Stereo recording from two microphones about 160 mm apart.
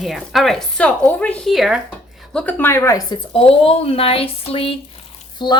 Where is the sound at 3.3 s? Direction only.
35° left (ahead or behind).